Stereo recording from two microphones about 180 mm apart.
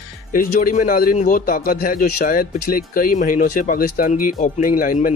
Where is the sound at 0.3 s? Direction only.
50° left (ahead or behind).